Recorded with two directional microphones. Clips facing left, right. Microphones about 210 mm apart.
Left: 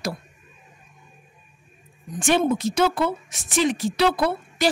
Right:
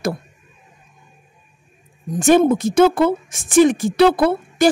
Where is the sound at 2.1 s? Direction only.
45° right (ahead or behind).